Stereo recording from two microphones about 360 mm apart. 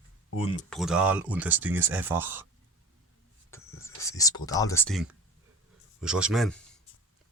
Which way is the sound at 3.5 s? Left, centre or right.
Centre.